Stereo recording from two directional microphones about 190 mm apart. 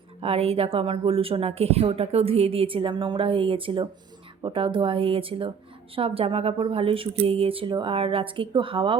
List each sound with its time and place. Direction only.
0.2 s a woman's voice: 30° right (ahead or behind)